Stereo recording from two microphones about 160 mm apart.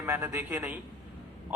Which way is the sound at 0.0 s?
15° right (ahead or behind).